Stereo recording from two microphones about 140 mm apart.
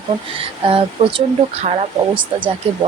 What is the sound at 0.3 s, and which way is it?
Speech, 40° right (ahead or behind).